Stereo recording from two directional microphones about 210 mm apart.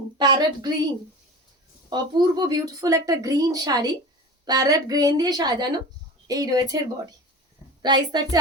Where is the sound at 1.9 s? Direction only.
20° right (ahead or behind).